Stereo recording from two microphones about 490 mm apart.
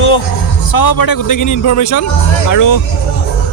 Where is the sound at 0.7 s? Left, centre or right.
Left.